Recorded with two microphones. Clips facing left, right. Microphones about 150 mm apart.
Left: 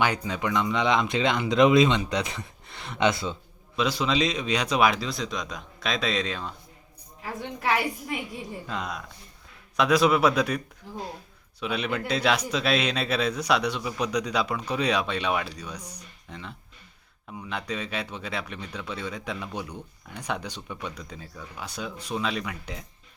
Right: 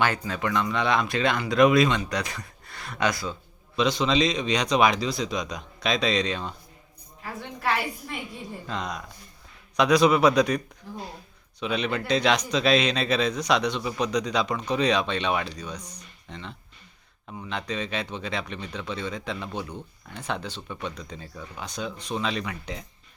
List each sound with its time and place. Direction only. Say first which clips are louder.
0.0 s speech: even; 15° left (ahead or behind)
3.8 s speech: right 2 dB; 5° left (ahead or behind)
8.6 s speech: right 4 dB; 5° left (ahead or behind)
11.6 s speech: right 1 dB; 5° left (ahead or behind)